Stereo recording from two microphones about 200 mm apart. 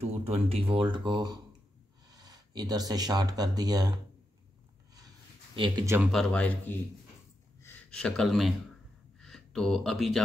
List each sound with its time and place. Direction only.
0.5 s speech: 30° right (ahead or behind)
5.6 s speech: 20° right (ahead or behind)
5.9 s speech: 5° left (ahead or behind)